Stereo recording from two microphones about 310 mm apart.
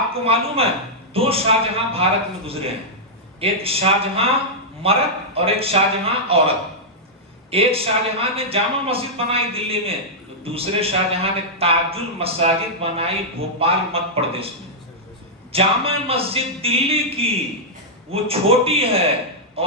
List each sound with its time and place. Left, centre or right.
0.1 s a man's voice: centre
7.5 s a man's voice: centre
15.5 s a man's voice: centre